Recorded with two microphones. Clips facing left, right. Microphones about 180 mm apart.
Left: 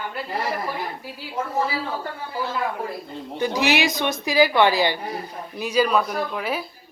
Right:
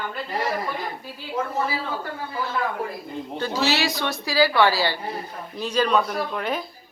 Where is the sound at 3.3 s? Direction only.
15° left (ahead or behind).